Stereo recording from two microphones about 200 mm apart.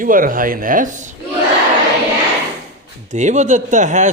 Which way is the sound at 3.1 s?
35° right (ahead or behind).